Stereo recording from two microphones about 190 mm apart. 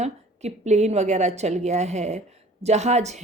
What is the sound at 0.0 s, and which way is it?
A woman's voice, 35° right (ahead or behind).